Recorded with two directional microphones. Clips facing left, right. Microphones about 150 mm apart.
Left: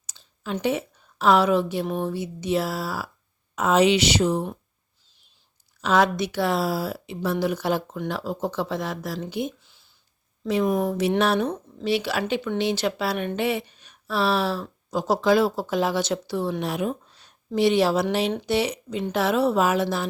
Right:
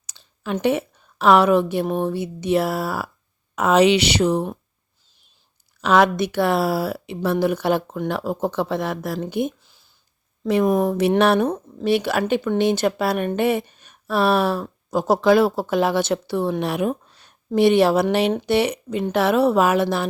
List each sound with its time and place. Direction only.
0.0 s a woman's voice: 65° right (ahead or behind)
5.8 s speech: 65° right (ahead or behind)